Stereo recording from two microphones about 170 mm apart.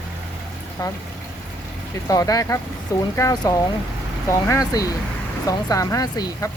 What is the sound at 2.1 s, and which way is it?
Speech, 20° left (ahead or behind).